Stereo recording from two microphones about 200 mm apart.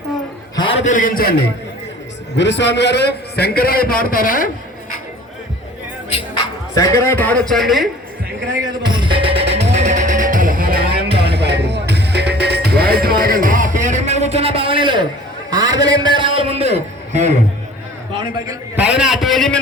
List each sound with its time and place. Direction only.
0.5 s a sound: 25° left (ahead or behind)
0.9 s a man's voice: 40° left (ahead or behind)
2.3 s a man's voice: 60° left (ahead or behind); by 4.4 s 45° left (ahead or behind)
6.7 s a man's voice: 15° left (ahead or behind)
8.9 s music: 25° right (ahead or behind)
15.4 s a man's voice: 20° right (ahead or behind); by 17.3 s 35° right (ahead or behind)
18.8 s a man's voice: 5° right (ahead or behind)